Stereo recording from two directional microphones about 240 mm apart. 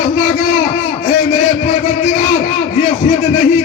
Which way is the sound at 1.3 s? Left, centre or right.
Left.